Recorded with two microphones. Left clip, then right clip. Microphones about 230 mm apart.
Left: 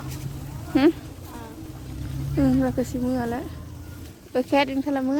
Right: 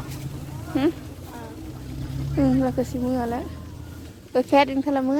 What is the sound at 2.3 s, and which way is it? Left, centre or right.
Speech, centre.